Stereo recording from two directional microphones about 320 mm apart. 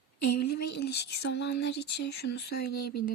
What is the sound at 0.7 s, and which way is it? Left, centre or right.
Speech, left.